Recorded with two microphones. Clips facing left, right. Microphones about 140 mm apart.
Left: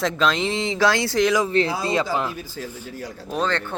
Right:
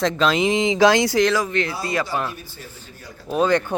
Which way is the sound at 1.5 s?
30° left (ahead or behind).